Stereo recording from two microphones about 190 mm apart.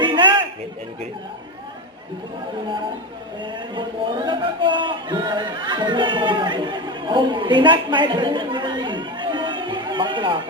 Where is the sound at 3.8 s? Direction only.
25° right (ahead or behind).